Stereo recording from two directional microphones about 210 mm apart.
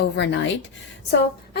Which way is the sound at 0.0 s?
55° left (ahead or behind).